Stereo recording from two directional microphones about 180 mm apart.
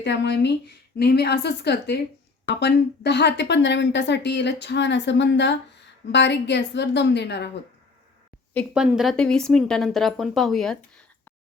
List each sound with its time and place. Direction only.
0.0 s a woman's voice: 75° left (ahead or behind)
8.7 s speech: 5° right (ahead or behind)